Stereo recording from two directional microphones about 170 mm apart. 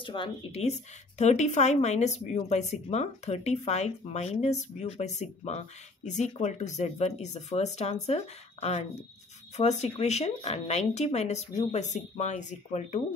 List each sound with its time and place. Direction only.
0.0 s speech: 30° left (ahead or behind); by 13.0 s 45° left (ahead or behind)